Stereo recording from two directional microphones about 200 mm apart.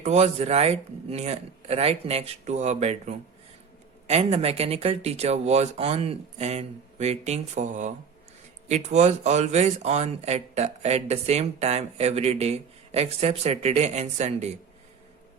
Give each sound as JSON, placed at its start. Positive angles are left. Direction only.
{"t": 0.0, "sound": "speech", "side_deg": -35}